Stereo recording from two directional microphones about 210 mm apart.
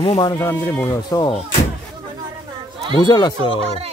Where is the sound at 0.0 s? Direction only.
25° left (ahead or behind).